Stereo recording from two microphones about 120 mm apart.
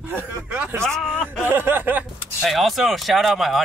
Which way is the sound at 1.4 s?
15° right (ahead or behind).